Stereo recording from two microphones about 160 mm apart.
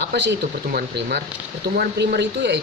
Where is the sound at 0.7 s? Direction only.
70° right (ahead or behind).